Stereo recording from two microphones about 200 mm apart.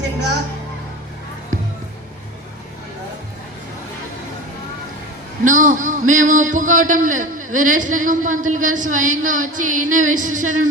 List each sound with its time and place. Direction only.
5.5 s a man's voice: 40° right (ahead or behind)